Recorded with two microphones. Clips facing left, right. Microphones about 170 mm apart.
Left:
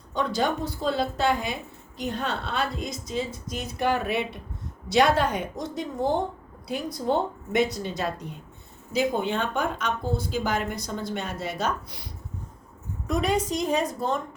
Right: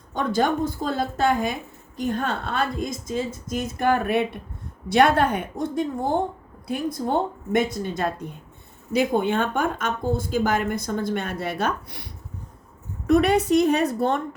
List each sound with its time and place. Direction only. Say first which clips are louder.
0.1 s a woman's voice: right 3 dB; 50° right (ahead or behind)
13.1 s a woman's voice: right 7 dB; 65° right (ahead or behind)